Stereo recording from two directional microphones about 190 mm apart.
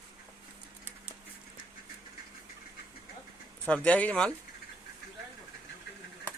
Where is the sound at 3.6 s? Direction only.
5° left (ahead or behind).